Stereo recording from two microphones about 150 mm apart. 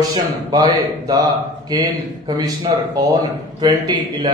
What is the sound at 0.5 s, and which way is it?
A man's voice, 25° right (ahead or behind).